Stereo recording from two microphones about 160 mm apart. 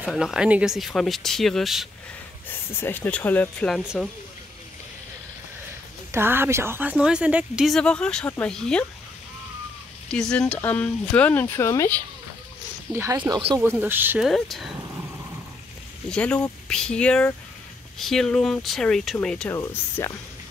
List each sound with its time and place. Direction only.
0.0 s speech: 5° right (ahead or behind)
2.4 s speech: 15° left (ahead or behind); by 4.1 s centre (ahead or behind)
6.1 s speech: 15° right (ahead or behind); by 8.8 s 5° left (ahead or behind)
10.0 s speech: 5° left (ahead or behind)
12.9 s speech: 15° right (ahead or behind)
14.2 s speech: centre (ahead or behind)
16.1 s speech: 5° left (ahead or behind)
19.5 s speech: 15° left (ahead or behind)